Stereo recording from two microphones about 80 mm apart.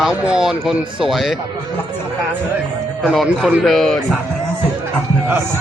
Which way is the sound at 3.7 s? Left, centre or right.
Centre.